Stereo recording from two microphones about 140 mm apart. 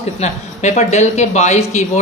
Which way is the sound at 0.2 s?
55° left (ahead or behind).